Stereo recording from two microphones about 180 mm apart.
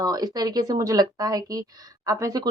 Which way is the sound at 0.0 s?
20° right (ahead or behind).